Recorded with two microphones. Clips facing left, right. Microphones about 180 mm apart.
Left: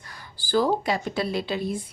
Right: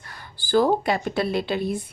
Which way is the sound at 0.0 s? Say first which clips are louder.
Right 2 dB; 60° right (ahead or behind).